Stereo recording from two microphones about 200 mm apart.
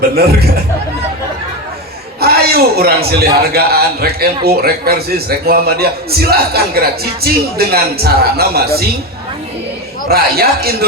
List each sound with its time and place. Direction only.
2.2 s a man's voice: 50° right (ahead or behind)
10.1 s a man's voice: 50° right (ahead or behind)